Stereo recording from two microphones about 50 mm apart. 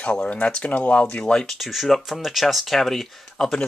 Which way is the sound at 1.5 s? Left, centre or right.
Centre.